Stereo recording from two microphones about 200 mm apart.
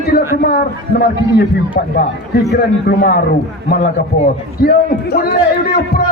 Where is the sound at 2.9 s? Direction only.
50° left (ahead or behind).